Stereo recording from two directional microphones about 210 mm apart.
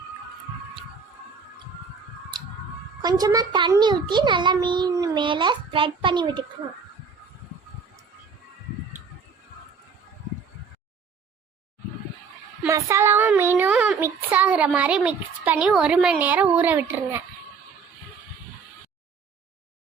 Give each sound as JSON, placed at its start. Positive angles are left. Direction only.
{"t": 3.0, "sound": "a child's voice", "side_deg": -20}
{"t": 12.6, "sound": "child singing", "side_deg": -15}